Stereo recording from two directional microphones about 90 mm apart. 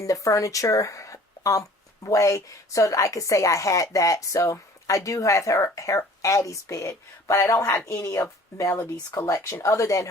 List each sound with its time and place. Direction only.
0.0 s a woman's voice: 35° left (ahead or behind)